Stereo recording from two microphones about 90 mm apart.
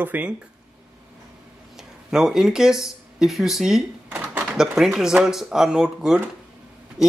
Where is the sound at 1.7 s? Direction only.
5° right (ahead or behind).